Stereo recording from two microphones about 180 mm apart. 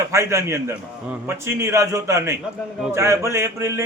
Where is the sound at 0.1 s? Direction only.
15° right (ahead or behind).